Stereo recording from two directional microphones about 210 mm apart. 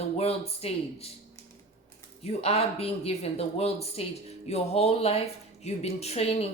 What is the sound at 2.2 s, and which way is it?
Speech, 30° left (ahead or behind).